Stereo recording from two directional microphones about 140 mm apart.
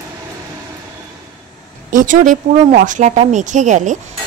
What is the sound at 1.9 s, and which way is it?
Speech, 70° right (ahead or behind).